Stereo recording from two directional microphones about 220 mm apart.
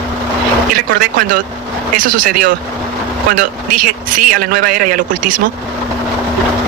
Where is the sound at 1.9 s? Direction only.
40° right (ahead or behind).